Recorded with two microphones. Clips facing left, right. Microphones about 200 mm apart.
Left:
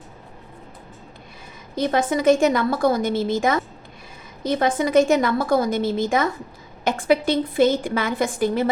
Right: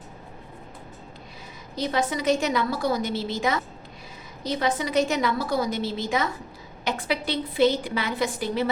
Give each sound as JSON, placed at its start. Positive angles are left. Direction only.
{"t": 1.7, "sound": "a woman's voice", "side_deg": 50}